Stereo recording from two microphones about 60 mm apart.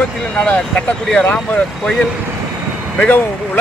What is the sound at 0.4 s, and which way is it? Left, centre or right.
Speech, left.